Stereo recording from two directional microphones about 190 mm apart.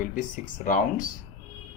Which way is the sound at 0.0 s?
45° left (ahead or behind).